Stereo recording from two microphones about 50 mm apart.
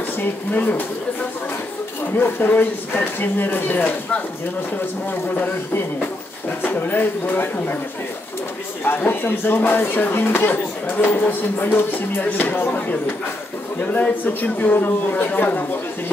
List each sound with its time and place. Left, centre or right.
0.5 s speech: left
2.1 s speech: left
5.5 s speech: left
8.8 s speech: left